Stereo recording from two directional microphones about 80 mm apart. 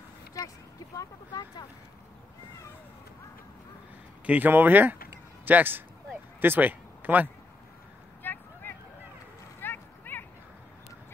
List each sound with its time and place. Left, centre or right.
0.9 s speech: left
4.3 s speech: right
8.2 s vehicle: left
9.6 s a sound: left